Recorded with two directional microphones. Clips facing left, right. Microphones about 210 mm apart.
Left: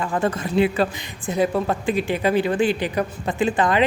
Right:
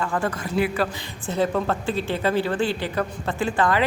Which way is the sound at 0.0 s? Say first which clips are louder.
Left 3 dB; 20° left (ahead or behind).